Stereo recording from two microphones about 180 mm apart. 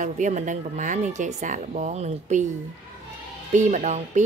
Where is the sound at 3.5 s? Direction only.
45° right (ahead or behind).